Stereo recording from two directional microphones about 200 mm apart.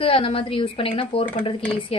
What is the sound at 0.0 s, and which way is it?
Speech, 25° left (ahead or behind).